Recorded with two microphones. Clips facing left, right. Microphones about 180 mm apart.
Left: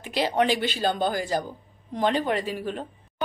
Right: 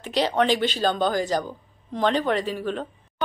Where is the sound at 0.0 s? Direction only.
10° left (ahead or behind).